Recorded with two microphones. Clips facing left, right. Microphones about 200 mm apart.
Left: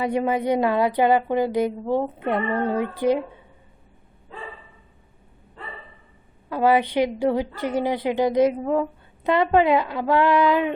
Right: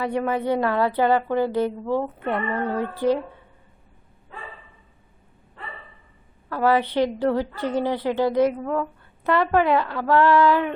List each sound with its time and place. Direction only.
0.0 s a woman's voice: 15° left (ahead or behind)
6.5 s a woman's voice: 15° left (ahead or behind)